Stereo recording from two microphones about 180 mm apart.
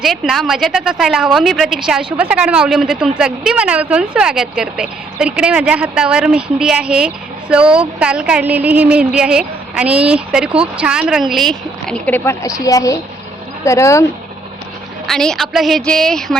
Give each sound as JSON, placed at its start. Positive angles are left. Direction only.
{"t": 0.0, "sound": "a woman's voice", "side_deg": 0}
{"t": 15.0, "sound": "a woman's voice", "side_deg": 5}